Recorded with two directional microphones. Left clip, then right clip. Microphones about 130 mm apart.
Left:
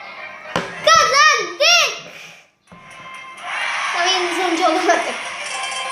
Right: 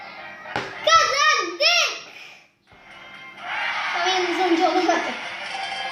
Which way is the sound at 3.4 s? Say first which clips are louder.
Left 3 dB; 25° left (ahead or behind).